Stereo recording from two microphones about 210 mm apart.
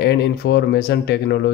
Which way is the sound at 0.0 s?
50° left (ahead or behind).